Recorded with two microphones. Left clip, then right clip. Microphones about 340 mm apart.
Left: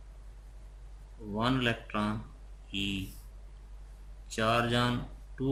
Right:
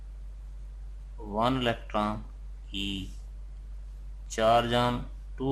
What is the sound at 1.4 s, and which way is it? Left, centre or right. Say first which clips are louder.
Speech: right 3 dB; centre.